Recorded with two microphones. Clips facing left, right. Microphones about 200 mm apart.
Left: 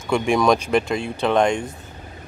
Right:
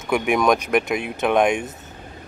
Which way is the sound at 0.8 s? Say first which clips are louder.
Even; 20° right (ahead or behind).